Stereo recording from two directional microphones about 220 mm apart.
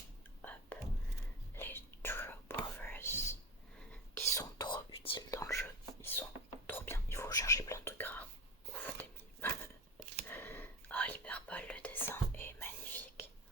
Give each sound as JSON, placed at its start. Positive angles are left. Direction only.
{"t": 1.5, "sound": "whispering", "side_deg": 10}
{"t": 8.7, "sound": "dog", "side_deg": 10}
{"t": 10.2, "sound": "whispering", "side_deg": 10}